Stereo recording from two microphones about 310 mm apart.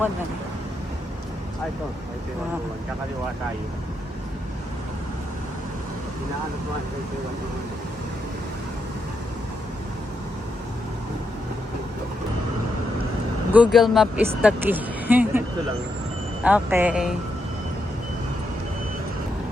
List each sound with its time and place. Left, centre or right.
13.5 s speech: centre